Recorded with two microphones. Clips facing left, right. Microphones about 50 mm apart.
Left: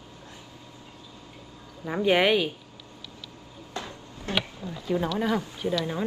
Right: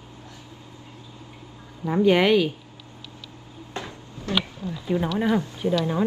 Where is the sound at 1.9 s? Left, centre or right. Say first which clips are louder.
Right 4 dB; centre.